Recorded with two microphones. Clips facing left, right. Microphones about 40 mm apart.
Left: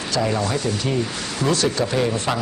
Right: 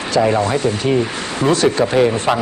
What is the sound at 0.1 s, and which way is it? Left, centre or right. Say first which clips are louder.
Speech: right 7 dB; right.